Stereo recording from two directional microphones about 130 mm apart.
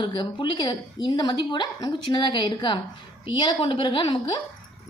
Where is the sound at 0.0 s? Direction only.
35° left (ahead or behind).